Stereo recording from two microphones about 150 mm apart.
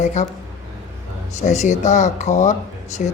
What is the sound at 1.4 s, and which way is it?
Speech, 50° left (ahead or behind).